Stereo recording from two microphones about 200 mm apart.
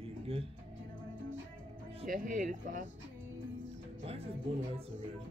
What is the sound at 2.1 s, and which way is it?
Speech, 45° right (ahead or behind).